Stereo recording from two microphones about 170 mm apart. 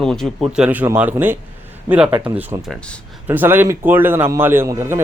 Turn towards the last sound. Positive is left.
turn(degrees=-15)  # may be behind; listen again after turning